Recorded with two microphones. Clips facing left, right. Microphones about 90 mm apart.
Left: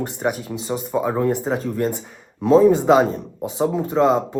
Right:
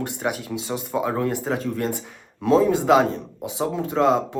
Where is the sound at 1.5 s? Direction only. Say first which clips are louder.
Left 3 dB; 5° left (ahead or behind).